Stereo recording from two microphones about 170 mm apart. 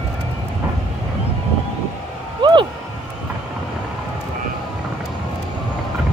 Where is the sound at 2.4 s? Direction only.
30° right (ahead or behind).